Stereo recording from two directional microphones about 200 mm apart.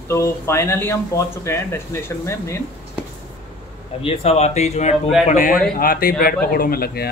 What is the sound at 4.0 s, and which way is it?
A man's voice, 30° left (ahead or behind).